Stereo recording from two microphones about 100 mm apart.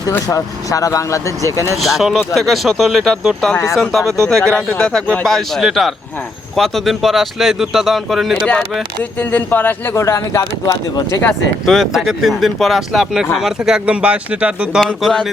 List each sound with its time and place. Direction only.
0.3 s speech: 35° left (ahead or behind)
1.8 s speech: centre (ahead or behind)
9.1 s speech: 15° left (ahead or behind)
11.6 s speech: centre (ahead or behind)
14.8 s speech: 5° left (ahead or behind)